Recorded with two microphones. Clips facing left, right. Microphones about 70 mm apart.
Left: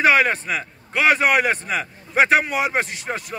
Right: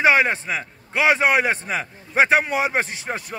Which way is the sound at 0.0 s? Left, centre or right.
Right.